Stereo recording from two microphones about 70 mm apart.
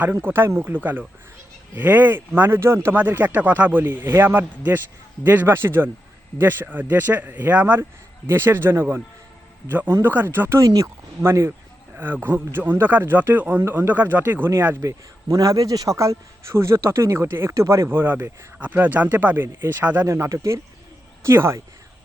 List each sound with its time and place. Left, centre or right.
0.0 s speech: right
2.9 s speech: right
10.6 s speech: right
11.2 s speech: right
14.8 s a man's voice: right
17.8 s speech: right
20.1 s a man's voice: right